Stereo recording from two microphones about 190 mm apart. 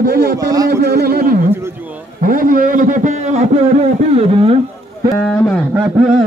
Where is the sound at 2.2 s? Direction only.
45° right (ahead or behind).